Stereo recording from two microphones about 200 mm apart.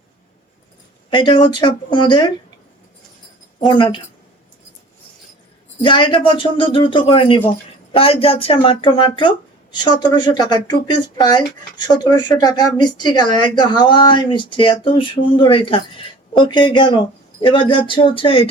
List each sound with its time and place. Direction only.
1.1 s speech: 25° left (ahead or behind)
3.7 s speech: 25° left (ahead or behind)
5.8 s speech: 25° left (ahead or behind)